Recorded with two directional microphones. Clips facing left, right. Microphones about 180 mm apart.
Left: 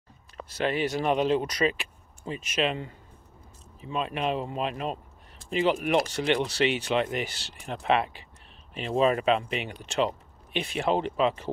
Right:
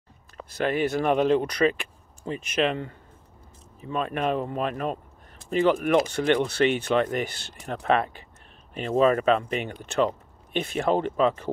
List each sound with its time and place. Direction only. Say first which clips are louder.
0.6 s speech: right 3 dB; 50° right (ahead or behind)